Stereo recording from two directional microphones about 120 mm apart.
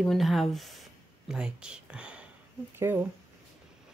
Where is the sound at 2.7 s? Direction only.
20° right (ahead or behind).